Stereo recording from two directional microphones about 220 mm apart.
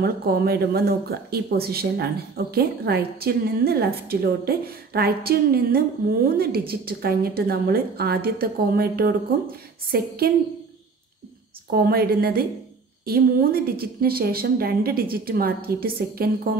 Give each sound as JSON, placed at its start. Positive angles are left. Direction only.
{"t": 0.0, "sound": "speech", "side_deg": -45}
{"t": 11.7, "sound": "speech", "side_deg": -45}